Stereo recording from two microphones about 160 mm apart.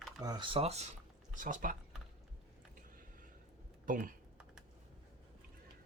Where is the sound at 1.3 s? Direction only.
55° right (ahead or behind).